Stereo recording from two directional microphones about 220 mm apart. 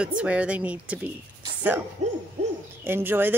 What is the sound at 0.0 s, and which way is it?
Speech, 5° right (ahead or behind).